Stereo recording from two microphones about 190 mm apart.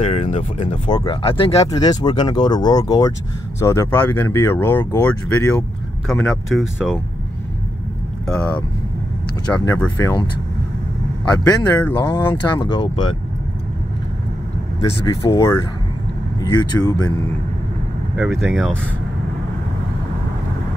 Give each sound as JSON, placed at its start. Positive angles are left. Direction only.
{"t": 0.0, "sound": "speech", "side_deg": 35}
{"t": 0.8, "sound": "speech", "side_deg": 25}
{"t": 1.7, "sound": "speech", "side_deg": 20}
{"t": 6.0, "sound": "speech", "side_deg": 0}
{"t": 9.5, "sound": "speech", "side_deg": 10}
{"t": 11.2, "sound": "speech", "side_deg": 20}
{"t": 14.8, "sound": "speech", "side_deg": 20}
{"t": 18.1, "sound": "speech", "side_deg": 0}